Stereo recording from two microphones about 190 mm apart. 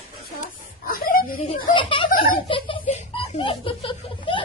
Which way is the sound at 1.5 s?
25° left (ahead or behind).